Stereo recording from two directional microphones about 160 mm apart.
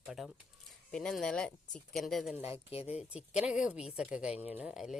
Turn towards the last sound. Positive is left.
turn(degrees=-5)  # may be behind; listen again after turning